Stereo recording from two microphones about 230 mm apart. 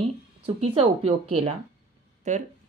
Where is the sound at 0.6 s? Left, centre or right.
Right.